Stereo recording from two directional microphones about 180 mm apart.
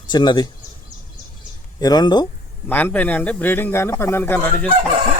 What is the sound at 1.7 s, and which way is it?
Speech, 20° left (ahead or behind).